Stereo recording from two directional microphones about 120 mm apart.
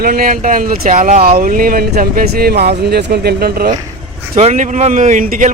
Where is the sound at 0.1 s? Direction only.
90° right.